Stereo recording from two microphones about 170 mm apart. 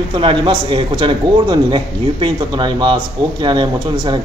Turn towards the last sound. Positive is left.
turn(degrees=-25)  # may be behind; listen again after turning